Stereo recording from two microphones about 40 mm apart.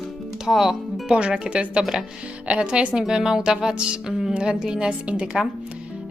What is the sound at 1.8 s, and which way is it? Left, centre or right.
Music, centre.